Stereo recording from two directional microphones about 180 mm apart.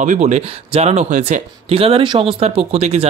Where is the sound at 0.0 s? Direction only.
40° right (ahead or behind).